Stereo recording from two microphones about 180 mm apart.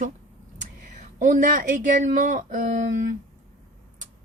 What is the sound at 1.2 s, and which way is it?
Speech, 45° right (ahead or behind).